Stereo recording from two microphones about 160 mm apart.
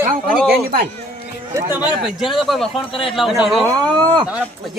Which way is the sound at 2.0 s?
Centre (ahead or behind).